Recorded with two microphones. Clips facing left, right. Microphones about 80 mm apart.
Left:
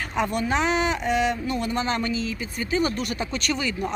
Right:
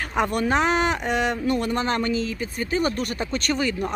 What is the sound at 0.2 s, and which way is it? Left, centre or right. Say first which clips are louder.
Speech: right 2 dB; right.